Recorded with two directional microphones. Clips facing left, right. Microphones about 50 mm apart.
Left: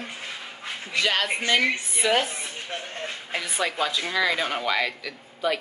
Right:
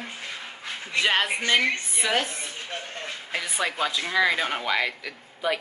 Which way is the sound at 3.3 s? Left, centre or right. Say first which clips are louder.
Left 1 dB; centre.